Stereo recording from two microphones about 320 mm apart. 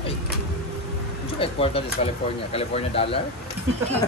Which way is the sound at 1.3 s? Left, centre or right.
Centre.